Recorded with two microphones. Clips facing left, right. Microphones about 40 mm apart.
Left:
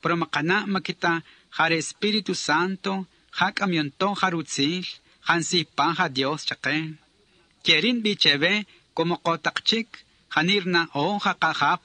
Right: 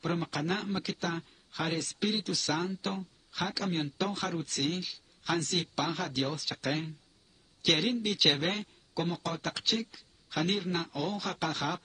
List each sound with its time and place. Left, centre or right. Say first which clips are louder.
0.0 s a man's voice: left 9 dB; left